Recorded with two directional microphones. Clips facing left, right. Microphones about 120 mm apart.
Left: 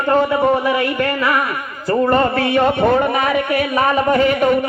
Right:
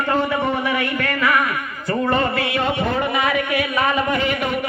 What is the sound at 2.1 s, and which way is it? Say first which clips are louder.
A man's voice: left 5 dB; 45° left (ahead or behind).